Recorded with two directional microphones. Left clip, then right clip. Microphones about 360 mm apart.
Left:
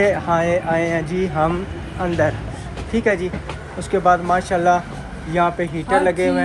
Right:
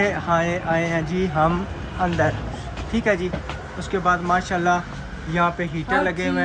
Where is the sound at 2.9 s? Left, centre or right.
Centre.